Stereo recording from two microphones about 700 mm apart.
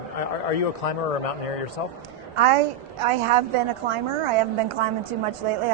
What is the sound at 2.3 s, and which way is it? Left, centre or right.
A woman's voice, right.